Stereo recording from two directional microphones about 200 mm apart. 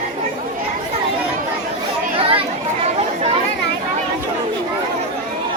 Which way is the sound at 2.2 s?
30° right (ahead or behind).